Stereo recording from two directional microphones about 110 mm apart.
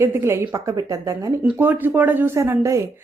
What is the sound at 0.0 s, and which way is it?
A woman's voice, 20° right (ahead or behind).